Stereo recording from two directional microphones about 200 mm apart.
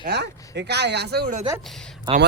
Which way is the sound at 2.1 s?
25° right (ahead or behind).